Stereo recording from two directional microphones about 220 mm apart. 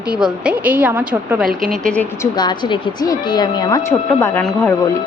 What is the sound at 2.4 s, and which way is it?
A woman's voice, 20° left (ahead or behind).